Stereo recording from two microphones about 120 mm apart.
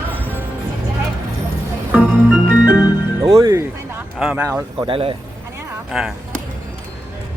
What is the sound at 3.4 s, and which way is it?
Speech, 25° right (ahead or behind).